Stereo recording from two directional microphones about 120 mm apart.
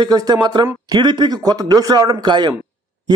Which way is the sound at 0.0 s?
30° right (ahead or behind).